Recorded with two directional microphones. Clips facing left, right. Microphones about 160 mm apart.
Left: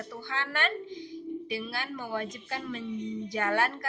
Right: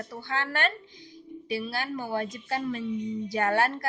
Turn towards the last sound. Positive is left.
turn(degrees=-35)  # may be behind; listen again after turning